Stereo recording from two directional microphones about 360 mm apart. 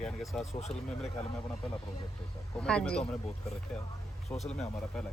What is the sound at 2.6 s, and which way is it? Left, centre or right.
Speech, centre.